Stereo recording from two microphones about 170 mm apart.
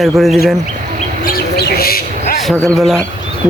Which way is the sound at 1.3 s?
65° left (ahead or behind).